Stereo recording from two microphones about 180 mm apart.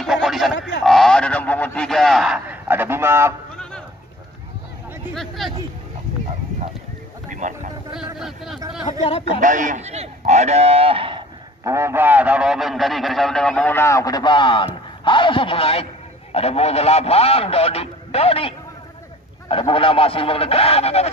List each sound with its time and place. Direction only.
0.0 s a sound: centre (ahead or behind)
0.8 s a man's voice: centre (ahead or behind); by 3.3 s 15° right (ahead or behind)
5.1 s a man's voice: centre (ahead or behind)
7.2 s speech: 45° right (ahead or behind)
7.9 s a man's voice: centre (ahead or behind)
9.4 s speech: 45° right (ahead or behind); by 11.2 s 30° right (ahead or behind)
11.6 s a man's voice: 15° right (ahead or behind); by 18.5 s 35° left (ahead or behind)
19.5 s a man's voice: 30° left (ahead or behind)